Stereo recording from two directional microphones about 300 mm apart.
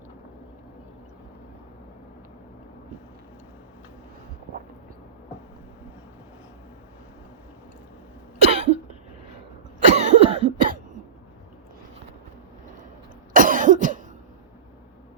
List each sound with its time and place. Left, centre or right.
8.4 s cough: right
13.3 s cough: right